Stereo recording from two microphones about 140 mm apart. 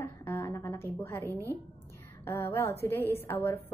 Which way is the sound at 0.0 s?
20° left (ahead or behind).